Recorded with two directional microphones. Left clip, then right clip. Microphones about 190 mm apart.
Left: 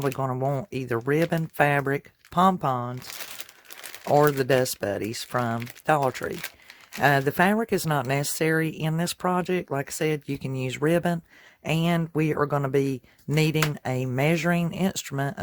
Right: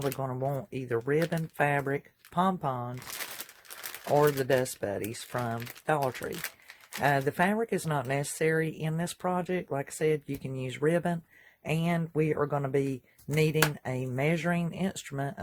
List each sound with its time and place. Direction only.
0.0 s speech: 45° left (ahead or behind)
4.1 s speech: 45° left (ahead or behind)